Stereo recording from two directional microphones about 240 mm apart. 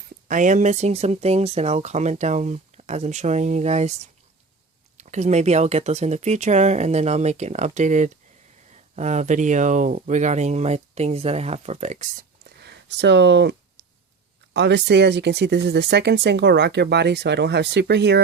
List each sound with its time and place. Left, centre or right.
0.3 s speech: right
12.5 s a sound: right
14.5 s speech: right